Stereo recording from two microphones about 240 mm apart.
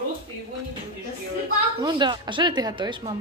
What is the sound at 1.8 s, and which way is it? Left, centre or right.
A woman's voice, centre.